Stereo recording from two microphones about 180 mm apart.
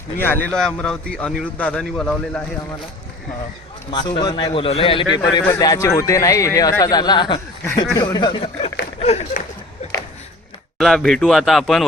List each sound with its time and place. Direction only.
0.2 s a man's voice: 5° left (ahead or behind)
3.9 s speech: 25° left (ahead or behind)
10.8 s a man's voice: centre (ahead or behind)